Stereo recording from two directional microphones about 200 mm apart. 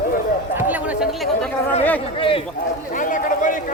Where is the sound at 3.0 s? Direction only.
40° left (ahead or behind).